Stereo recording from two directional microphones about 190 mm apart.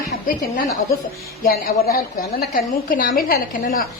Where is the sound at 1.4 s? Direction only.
55° left (ahead or behind).